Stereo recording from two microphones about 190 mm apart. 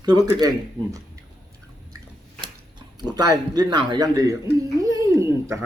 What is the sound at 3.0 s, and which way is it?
Speech, 20° right (ahead or behind).